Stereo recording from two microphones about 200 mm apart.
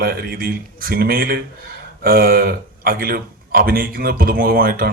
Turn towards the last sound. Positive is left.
turn(degrees=-50)  # may be behind; listen again after turning